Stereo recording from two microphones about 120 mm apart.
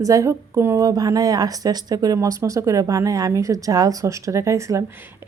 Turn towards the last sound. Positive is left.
turn(degrees=-25)  # may be behind; listen again after turning